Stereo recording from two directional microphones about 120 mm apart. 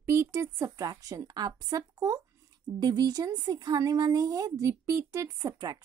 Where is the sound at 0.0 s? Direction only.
20° right (ahead or behind).